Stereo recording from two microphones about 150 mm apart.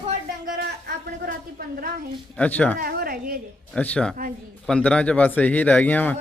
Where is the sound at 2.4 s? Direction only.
10° left (ahead or behind).